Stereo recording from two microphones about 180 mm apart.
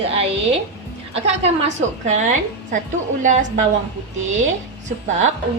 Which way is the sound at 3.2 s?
45° right (ahead or behind).